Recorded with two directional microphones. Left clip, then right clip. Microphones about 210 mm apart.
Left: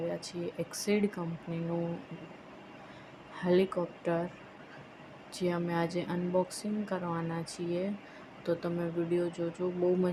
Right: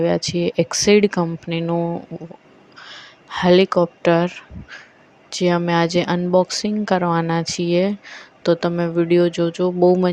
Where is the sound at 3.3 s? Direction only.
40° right (ahead or behind).